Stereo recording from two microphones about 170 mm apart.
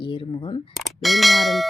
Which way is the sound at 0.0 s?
30° left (ahead or behind).